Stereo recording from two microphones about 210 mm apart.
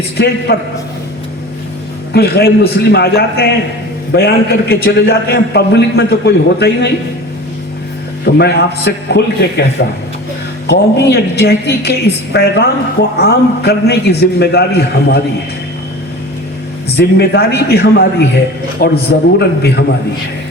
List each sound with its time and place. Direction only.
0.5 s a man's voice: 45° left (ahead or behind)
2.1 s a man's voice: 50° left (ahead or behind)
8.2 s a man's voice: 50° left (ahead or behind)
10.7 s a man's voice: 50° left (ahead or behind)
17.0 s a man's voice: 50° left (ahead or behind)